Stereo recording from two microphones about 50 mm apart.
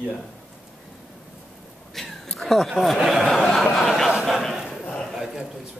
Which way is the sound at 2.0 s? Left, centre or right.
Centre.